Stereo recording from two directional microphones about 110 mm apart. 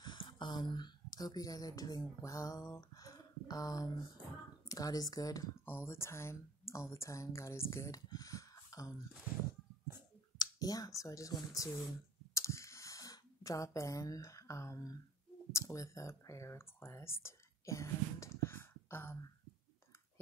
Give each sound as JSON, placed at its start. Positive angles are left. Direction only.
{"t": 0.0, "sound": "speech", "side_deg": 45}
{"t": 5.7, "sound": "speech", "side_deg": 20}
{"t": 10.4, "sound": "speech", "side_deg": 35}
{"t": 12.4, "sound": "a sound", "side_deg": 25}
{"t": 15.5, "sound": "speech", "side_deg": 30}